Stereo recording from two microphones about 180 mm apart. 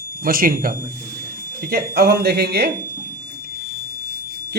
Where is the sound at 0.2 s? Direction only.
55° right (ahead or behind).